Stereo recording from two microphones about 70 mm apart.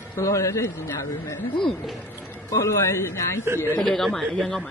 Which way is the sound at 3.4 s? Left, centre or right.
Right.